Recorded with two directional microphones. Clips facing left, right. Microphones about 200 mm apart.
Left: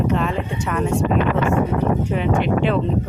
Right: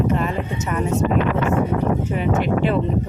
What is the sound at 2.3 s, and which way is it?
Speech, 45° right (ahead or behind).